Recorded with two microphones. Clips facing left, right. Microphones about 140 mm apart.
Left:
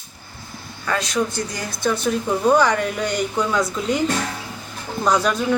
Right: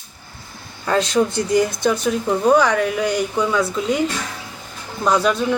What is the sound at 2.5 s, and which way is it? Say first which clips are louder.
Speech: right 1 dB; 5° right (ahead or behind).